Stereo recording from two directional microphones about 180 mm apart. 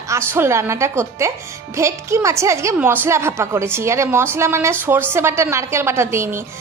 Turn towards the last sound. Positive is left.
turn(degrees=-15)  # may be behind; listen again after turning